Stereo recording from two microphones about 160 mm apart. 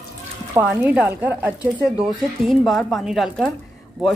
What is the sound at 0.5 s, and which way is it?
Speech, 10° right (ahead or behind).